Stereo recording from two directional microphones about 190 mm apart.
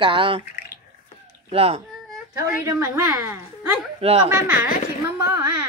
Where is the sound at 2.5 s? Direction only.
10° right (ahead or behind).